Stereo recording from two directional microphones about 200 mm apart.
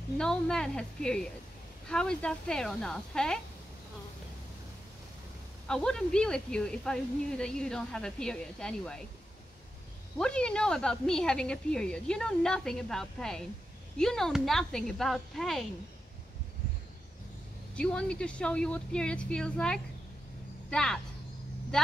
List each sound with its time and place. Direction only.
0.2 s speech: 5° left (ahead or behind)
5.7 s speech: 5° left (ahead or behind)
10.1 s speech: 5° left (ahead or behind)
17.7 s speech: 5° left (ahead or behind)